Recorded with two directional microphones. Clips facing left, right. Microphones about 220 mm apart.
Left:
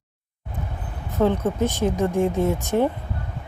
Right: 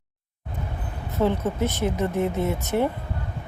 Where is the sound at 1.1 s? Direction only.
15° left (ahead or behind).